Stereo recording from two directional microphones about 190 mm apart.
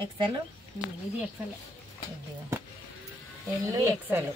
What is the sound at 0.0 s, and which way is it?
Speech, 25° right (ahead or behind).